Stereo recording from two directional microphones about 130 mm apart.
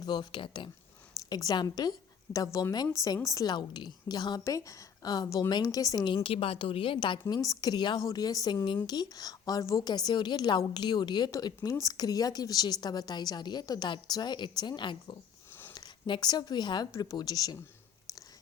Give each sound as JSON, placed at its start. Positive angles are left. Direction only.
{"t": 0.0, "sound": "a woman's voice", "side_deg": 35}
{"t": 6.2, "sound": "a woman's voice", "side_deg": 45}